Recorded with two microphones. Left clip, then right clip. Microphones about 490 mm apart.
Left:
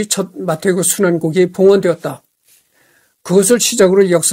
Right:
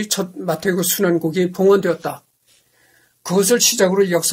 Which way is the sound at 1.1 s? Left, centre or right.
Left.